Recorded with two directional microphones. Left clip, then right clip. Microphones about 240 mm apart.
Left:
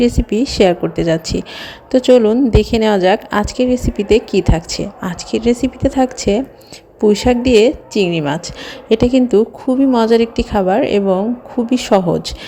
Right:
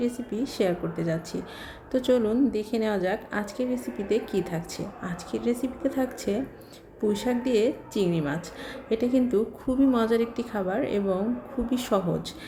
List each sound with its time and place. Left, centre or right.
0.0 s a woman's voice: left